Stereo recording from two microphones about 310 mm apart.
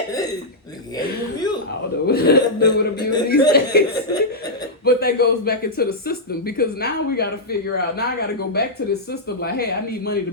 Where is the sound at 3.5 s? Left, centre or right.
Left.